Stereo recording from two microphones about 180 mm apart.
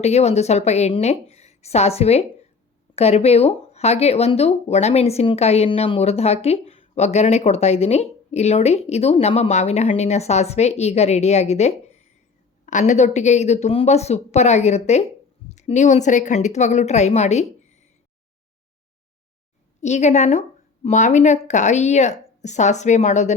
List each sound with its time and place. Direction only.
0.0 s speech: 35° left (ahead or behind)
19.8 s speech: 40° left (ahead or behind)